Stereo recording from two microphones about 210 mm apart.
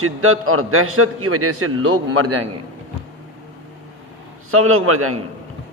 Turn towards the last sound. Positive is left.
turn(degrees=-90)